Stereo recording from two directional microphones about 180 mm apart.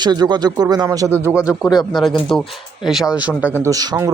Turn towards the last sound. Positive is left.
turn(degrees=-20)  # may be behind; listen again after turning